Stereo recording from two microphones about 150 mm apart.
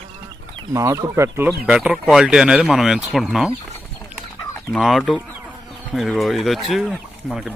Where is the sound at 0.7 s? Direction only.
20° right (ahead or behind).